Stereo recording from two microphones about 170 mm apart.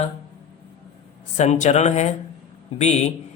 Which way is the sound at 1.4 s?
45° left (ahead or behind).